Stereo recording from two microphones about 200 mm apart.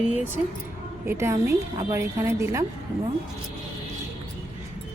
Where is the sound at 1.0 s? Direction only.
10° right (ahead or behind).